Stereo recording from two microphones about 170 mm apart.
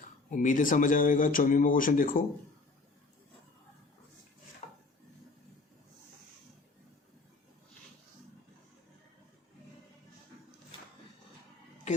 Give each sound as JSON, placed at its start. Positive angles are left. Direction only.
{"t": 0.3, "sound": "speech", "side_deg": 50}
{"t": 4.6, "sound": "wood", "side_deg": 40}